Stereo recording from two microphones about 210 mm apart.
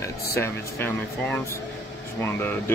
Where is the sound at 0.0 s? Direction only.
10° left (ahead or behind).